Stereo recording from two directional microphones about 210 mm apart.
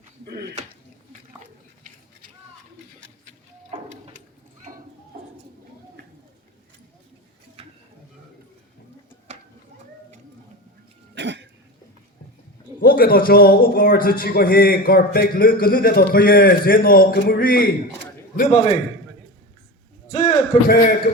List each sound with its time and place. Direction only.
7.6 s a sound: 30° right (ahead or behind)
11.1 s cough: 55° right (ahead or behind)
12.8 s a man's voice: 45° left (ahead or behind)
20.1 s a man's voice: 35° left (ahead or behind)